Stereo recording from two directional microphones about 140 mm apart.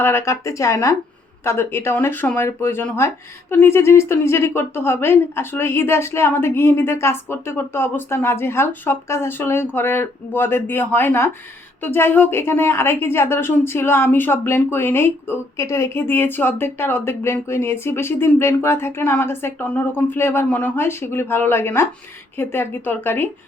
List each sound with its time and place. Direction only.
0.0 s a woman's voice: 15° left (ahead or behind)